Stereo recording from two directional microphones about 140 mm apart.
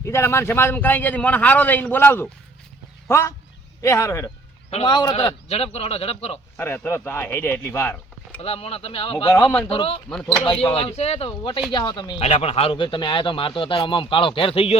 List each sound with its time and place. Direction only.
0.0 s a man's voice: 20° left (ahead or behind)
4.9 s speech: 30° left (ahead or behind)
5.5 s speech: 45° left (ahead or behind)
6.6 s a man's voice: 15° left (ahead or behind)
8.4 s speech: 45° left (ahead or behind)
9.3 s speech: 20° left (ahead or behind)
9.6 s speech: 40° left (ahead or behind)